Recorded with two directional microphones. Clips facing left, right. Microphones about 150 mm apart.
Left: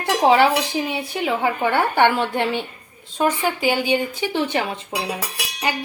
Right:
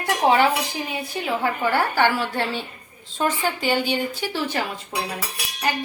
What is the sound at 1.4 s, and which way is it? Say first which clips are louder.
A woman's voice: left 1 dB; 20° left (ahead or behind).